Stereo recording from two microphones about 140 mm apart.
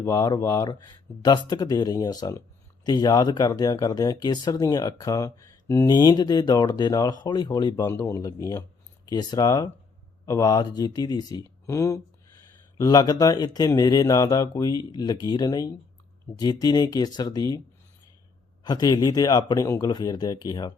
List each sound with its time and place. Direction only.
0.0 s speech: 25° left (ahead or behind)
18.6 s speech: 30° left (ahead or behind)